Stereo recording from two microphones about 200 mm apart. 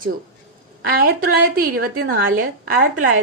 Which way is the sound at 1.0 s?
50° right (ahead or behind).